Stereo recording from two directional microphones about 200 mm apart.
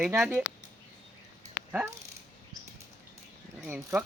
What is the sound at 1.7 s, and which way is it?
Speech, 10° right (ahead or behind).